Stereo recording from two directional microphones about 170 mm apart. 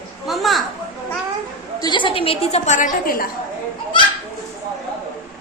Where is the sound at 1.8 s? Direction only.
25° left (ahead or behind); by 3.2 s 55° left (ahead or behind).